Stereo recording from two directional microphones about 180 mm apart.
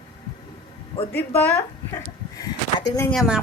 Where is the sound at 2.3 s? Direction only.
20° left (ahead or behind).